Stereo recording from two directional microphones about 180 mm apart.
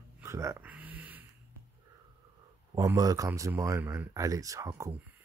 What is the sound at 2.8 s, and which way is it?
Speech, 20° right (ahead or behind).